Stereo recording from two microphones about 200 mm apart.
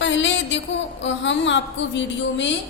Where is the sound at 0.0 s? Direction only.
65° left (ahead or behind).